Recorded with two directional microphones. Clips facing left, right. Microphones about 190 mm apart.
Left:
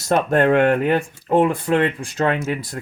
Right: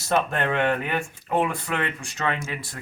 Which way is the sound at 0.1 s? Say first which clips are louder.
Left 8 dB; 50° left (ahead or behind).